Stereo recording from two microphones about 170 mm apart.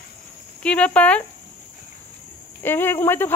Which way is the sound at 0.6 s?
5° left (ahead or behind).